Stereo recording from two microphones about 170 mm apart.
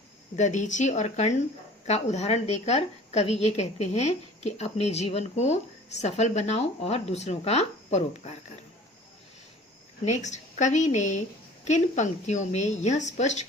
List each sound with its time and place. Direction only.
0.3 s a woman's voice: 45° left (ahead or behind)
10.1 s a woman's voice: 45° left (ahead or behind)